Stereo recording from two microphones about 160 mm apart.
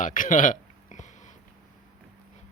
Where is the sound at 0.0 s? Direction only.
55° left (ahead or behind).